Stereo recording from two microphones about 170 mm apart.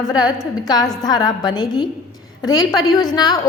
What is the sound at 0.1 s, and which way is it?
A woman's voice, 20° left (ahead or behind).